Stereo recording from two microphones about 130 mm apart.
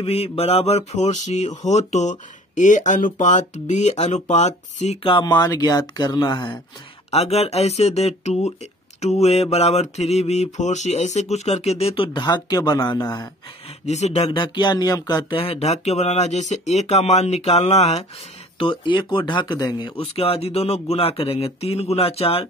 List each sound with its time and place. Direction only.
0.0 s speech: 50° left (ahead or behind)
5.2 s speech: 30° left (ahead or behind)
7.1 s mantra: 50° left (ahead or behind); by 13.0 s 35° left (ahead or behind)
13.0 s speech: 25° left (ahead or behind)
13.8 s speech: 60° left (ahead or behind); by 15.4 s 30° left (ahead or behind)
15.4 s speech: 50° left (ahead or behind)
18.6 s mantra: 40° left (ahead or behind)